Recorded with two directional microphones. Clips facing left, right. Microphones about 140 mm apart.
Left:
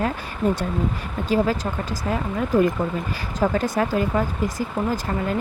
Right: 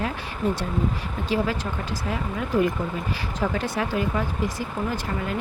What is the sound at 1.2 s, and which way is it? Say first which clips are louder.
Speech: left 4 dB; 40° left (ahead or behind).